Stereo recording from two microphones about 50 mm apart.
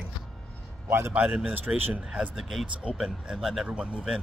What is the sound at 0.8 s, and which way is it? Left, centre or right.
Speech, right.